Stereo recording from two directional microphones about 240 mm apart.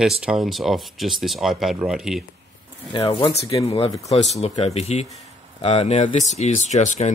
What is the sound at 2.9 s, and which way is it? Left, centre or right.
Speech, centre.